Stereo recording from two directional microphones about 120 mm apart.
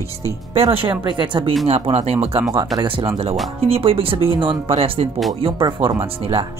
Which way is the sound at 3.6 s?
50° right (ahead or behind).